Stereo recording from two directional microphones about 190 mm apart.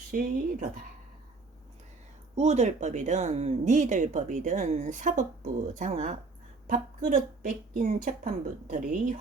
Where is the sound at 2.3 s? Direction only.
35° right (ahead or behind).